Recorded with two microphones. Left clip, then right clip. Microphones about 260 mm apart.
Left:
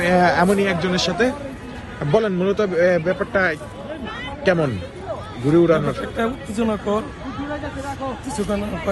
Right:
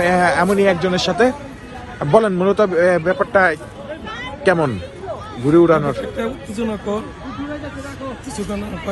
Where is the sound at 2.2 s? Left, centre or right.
Centre.